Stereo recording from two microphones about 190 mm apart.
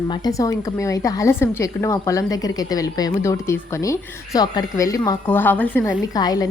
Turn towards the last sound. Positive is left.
turn(degrees=20)  # may be behind; listen again after turning